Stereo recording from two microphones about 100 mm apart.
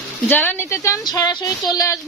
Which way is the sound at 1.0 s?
40° left (ahead or behind).